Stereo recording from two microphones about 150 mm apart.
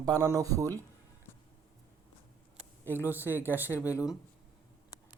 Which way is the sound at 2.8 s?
15° right (ahead or behind).